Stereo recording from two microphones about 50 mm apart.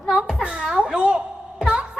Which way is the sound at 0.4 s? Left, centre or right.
Centre.